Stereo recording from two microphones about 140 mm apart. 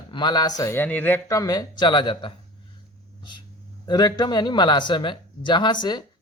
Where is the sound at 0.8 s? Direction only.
15° left (ahead or behind); by 2.3 s 35° left (ahead or behind).